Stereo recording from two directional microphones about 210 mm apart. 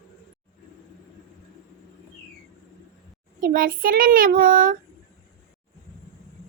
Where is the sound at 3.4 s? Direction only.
45° right (ahead or behind).